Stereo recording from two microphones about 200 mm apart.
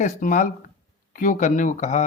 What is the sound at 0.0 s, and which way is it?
Speech, 40° left (ahead or behind).